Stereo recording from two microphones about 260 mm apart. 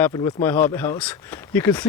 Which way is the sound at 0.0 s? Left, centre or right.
Centre.